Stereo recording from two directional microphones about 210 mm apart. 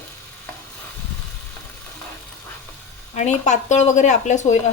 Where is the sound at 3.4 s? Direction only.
35° left (ahead or behind).